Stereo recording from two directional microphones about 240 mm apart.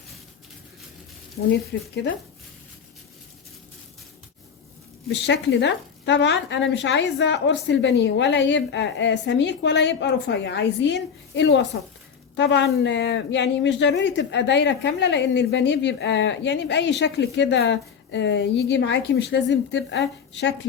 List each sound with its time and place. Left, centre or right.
1.7 s speech: left
5.0 s speech: left